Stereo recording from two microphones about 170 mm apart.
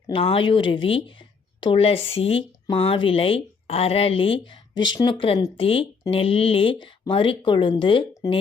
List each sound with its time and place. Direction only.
0.1 s speech: 35° left (ahead or behind)